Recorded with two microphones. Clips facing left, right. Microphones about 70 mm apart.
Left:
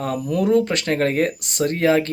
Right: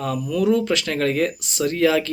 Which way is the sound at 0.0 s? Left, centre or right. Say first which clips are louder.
Even; left.